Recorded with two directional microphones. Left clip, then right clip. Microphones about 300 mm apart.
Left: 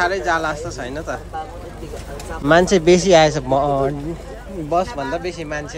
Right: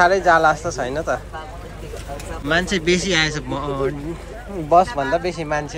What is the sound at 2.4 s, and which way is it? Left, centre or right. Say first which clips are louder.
A man's voice: left 6 dB; left.